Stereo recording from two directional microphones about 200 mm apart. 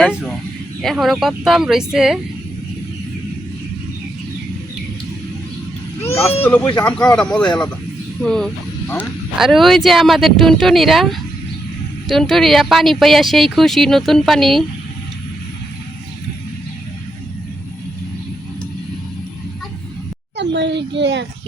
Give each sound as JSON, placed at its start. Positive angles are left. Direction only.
{"t": 0.0, "sound": "a woman's voice", "side_deg": 0}
{"t": 6.4, "sound": "a woman's voice", "side_deg": 5}
{"t": 20.3, "sound": "a sound", "side_deg": -60}